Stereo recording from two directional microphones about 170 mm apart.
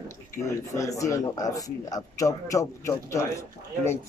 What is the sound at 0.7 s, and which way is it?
A man's voice, 20° left (ahead or behind).